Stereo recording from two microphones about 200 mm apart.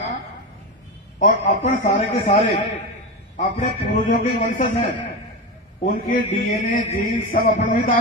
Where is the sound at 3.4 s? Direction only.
35° left (ahead or behind).